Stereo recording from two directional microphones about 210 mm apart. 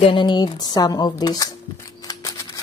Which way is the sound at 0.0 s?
20° left (ahead or behind).